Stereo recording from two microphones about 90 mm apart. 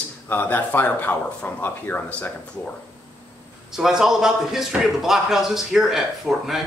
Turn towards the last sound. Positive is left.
turn(degrees=-5)  # may be behind; listen again after turning